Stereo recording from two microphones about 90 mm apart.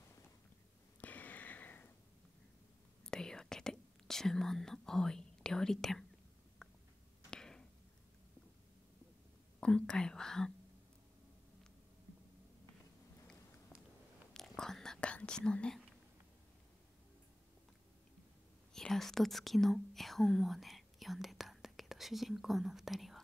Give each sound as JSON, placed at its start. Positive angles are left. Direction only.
{"t": 1.0, "sound": "a sound", "side_deg": 20}
{"t": 3.1, "sound": "whispering", "side_deg": 5}
{"t": 6.6, "sound": "a sound", "side_deg": 10}
{"t": 9.6, "sound": "whispering", "side_deg": 10}
{"t": 14.3, "sound": "whispering", "side_deg": 5}
{"t": 18.7, "sound": "whispering", "side_deg": 5}